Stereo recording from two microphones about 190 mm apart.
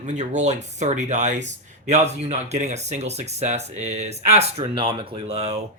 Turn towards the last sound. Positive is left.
turn(degrees=-30)  # may be behind; listen again after turning